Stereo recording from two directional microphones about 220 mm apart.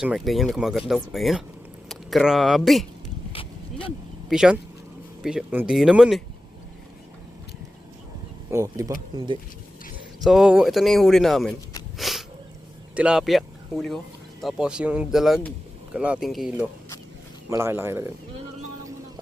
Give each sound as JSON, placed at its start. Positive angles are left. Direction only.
{"t": 0.0, "sound": "speech", "side_deg": 0}
{"t": 3.3, "sound": "a sound", "side_deg": 25}
{"t": 4.3, "sound": "speech", "side_deg": -5}
{"t": 8.4, "sound": "speech", "side_deg": -15}
{"t": 10.2, "sound": "speech", "side_deg": -5}
{"t": 11.9, "sound": "a sound", "side_deg": 0}
{"t": 12.9, "sound": "speech", "side_deg": -5}